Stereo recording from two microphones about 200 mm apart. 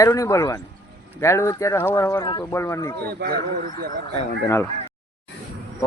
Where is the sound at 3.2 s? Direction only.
50° right (ahead or behind).